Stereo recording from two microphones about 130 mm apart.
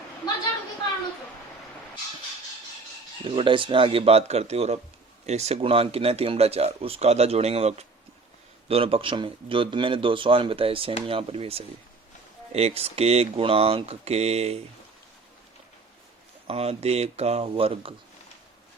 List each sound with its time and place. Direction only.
3.2 s speech: 40° right (ahead or behind)
16.5 s speech: 50° right (ahead or behind)